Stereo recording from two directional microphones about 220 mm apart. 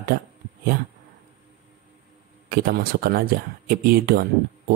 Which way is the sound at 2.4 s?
45° right (ahead or behind).